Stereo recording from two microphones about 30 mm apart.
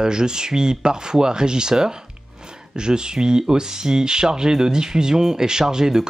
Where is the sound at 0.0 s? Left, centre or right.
Right.